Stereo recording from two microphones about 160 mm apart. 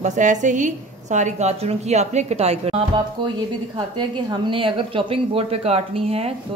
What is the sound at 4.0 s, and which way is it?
Speech, 30° right (ahead or behind).